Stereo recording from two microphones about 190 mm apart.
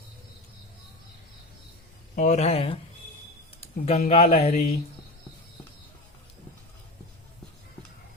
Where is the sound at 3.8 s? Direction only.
35° left (ahead or behind).